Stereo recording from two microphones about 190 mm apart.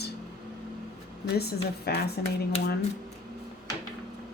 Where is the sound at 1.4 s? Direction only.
55° left (ahead or behind).